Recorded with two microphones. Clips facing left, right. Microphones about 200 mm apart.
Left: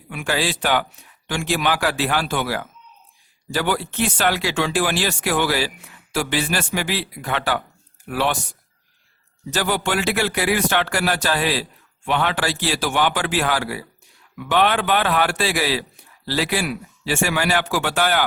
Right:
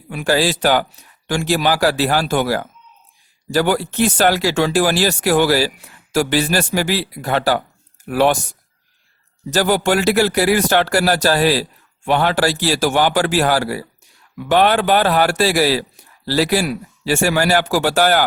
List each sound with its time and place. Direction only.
0.1 s speech: 35° right (ahead or behind)
9.5 s speech: 40° right (ahead or behind)